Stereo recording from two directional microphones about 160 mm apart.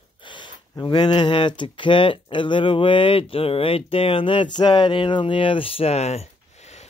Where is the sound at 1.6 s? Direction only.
30° left (ahead or behind).